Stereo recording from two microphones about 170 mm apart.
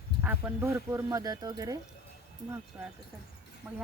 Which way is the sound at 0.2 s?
10° right (ahead or behind).